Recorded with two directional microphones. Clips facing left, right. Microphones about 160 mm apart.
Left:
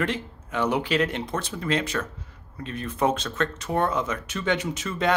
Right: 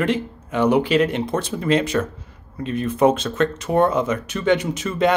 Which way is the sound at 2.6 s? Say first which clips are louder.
Right 8 dB; 10° right (ahead or behind).